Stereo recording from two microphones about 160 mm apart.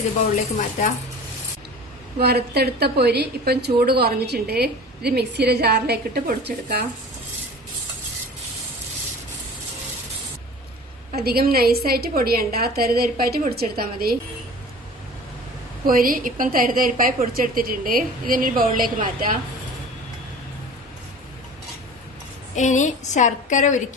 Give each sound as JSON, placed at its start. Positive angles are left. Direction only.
{"t": 2.1, "sound": "a woman's voice", "side_deg": -90}
{"t": 11.1, "sound": "a woman's voice", "side_deg": -75}
{"t": 15.9, "sound": "a woman's voice", "side_deg": -60}
{"t": 22.5, "sound": "a woman's voice", "side_deg": 50}